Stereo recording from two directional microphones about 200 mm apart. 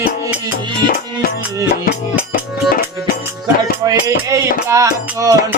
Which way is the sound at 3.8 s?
15° right (ahead or behind).